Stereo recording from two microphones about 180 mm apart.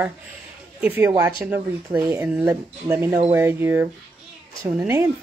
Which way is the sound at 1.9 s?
20° right (ahead or behind).